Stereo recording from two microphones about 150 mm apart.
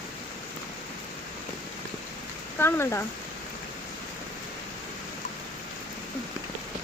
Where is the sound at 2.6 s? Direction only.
15° left (ahead or behind).